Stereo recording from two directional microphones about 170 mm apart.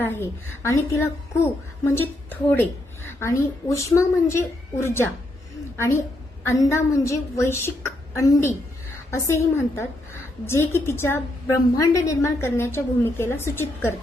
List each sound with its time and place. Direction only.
0.0 s a woman's voice: 15° left (ahead or behind)